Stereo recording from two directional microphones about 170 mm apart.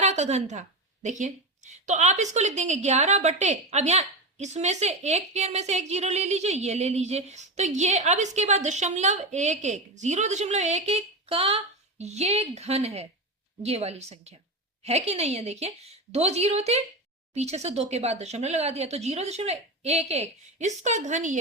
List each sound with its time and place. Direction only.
0.0 s a woman's voice: 40° right (ahead or behind)